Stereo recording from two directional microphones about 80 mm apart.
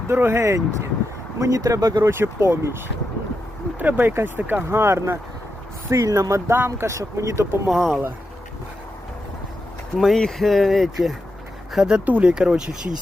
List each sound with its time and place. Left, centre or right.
0.1 s speech: right
2.0 s speech: right
3.8 s speech: right
5.9 s speech: right
6.7 s speech: right
7.7 s speech: centre
10.0 s speech: centre